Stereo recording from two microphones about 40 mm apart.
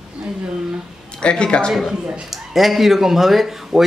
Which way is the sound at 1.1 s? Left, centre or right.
Left.